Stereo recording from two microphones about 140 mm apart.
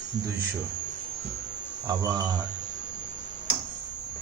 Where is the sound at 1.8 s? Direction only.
30° right (ahead or behind).